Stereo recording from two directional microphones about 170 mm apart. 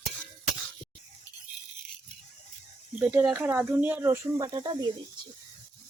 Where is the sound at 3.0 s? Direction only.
10° right (ahead or behind); by 4.8 s 25° right (ahead or behind).